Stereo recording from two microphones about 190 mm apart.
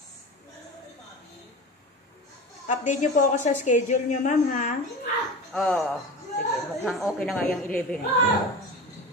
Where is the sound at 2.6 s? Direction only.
40° left (ahead or behind).